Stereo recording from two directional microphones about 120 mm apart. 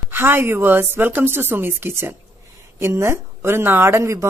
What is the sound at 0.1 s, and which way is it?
A woman's voice, 20° right (ahead or behind).